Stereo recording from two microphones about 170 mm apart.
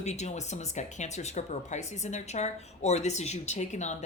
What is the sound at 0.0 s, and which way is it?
Speech, 40° left (ahead or behind).